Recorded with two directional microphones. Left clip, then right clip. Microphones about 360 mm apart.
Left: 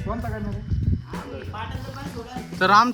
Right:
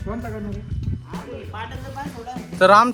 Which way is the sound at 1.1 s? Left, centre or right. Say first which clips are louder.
Right 2 dB; centre.